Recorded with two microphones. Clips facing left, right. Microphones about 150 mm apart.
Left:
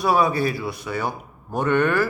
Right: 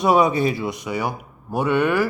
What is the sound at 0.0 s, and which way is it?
Speech, 20° right (ahead or behind).